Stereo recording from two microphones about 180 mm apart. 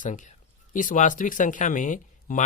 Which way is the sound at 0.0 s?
45° left (ahead or behind).